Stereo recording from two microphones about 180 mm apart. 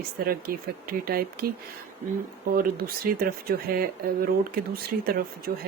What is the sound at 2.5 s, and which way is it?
Speech, 55° right (ahead or behind).